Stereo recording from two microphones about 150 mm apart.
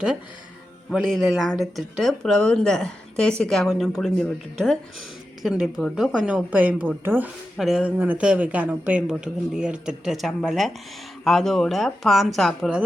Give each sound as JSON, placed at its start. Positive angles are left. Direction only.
{"t": 0.9, "sound": "a woman's voice", "side_deg": -5}
{"t": 7.5, "sound": "speech", "side_deg": 0}